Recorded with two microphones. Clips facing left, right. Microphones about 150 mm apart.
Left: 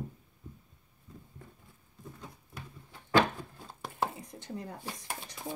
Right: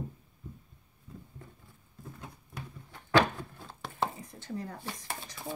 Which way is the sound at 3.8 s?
10° left (ahead or behind).